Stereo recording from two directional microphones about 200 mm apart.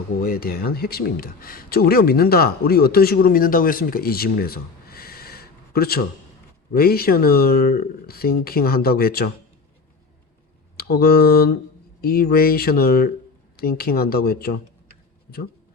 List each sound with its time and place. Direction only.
0.2 s speech: 50° left (ahead or behind)
10.8 s speech: 50° left (ahead or behind)